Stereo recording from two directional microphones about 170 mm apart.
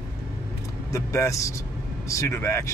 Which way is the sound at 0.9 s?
20° left (ahead or behind).